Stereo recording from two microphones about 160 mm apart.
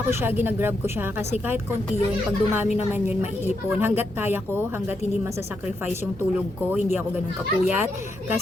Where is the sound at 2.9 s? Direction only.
10° right (ahead or behind).